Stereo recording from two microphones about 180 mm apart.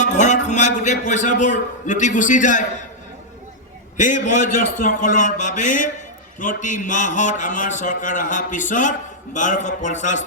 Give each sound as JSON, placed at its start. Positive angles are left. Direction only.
{"t": 0.0, "sound": "a sound", "side_deg": 40}
{"t": 0.4, "sound": "a man's voice", "side_deg": 40}
{"t": 3.9, "sound": "a man's voice", "side_deg": 45}